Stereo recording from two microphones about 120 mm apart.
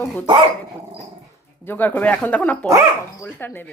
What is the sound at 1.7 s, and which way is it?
Speech, 15° left (ahead or behind).